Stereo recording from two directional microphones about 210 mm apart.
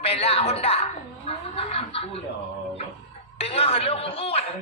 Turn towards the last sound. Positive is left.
turn(degrees=30)  # may be behind; listen again after turning